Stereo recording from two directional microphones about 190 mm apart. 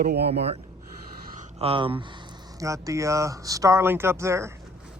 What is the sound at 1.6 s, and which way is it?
Speech, 30° right (ahead or behind).